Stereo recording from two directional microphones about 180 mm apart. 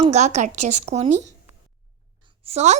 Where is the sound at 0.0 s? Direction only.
40° right (ahead or behind).